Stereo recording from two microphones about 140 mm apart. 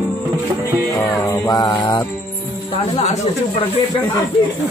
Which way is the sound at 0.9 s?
15° left (ahead or behind).